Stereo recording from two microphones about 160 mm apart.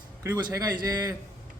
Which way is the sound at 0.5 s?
25° right (ahead or behind).